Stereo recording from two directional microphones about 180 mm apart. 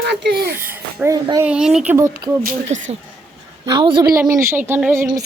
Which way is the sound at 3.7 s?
25° right (ahead or behind).